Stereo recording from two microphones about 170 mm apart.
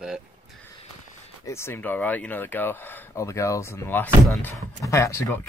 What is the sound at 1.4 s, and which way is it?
Speech, 15° left (ahead or behind).